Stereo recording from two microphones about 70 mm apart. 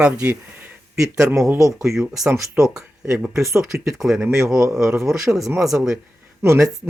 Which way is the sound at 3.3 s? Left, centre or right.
Right.